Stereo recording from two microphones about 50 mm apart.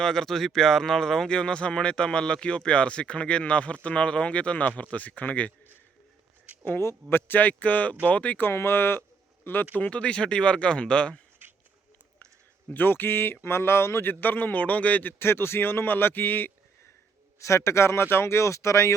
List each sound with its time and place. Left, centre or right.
0.0 s speech: centre; by 5.5 s left
7.1 s a man's voice: left
8.5 s speech: left
9.7 s speech: left
12.7 s speech: left
14.0 s a man's voice: left
15.2 s speech: left
17.4 s speech: left